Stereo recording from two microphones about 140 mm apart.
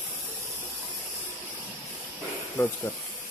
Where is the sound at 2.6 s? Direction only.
15° left (ahead or behind).